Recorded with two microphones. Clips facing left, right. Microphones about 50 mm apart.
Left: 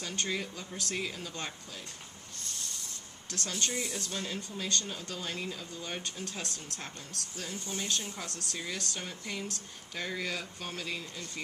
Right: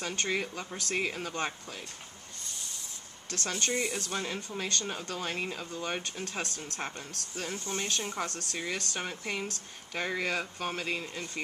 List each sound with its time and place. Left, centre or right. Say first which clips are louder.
0.0 s speech: right 3 dB; right
3.2 s speech: right 3 dB; right